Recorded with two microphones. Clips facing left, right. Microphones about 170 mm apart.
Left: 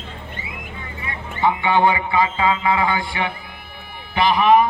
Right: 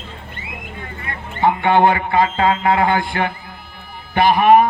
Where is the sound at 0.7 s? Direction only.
50° right (ahead or behind).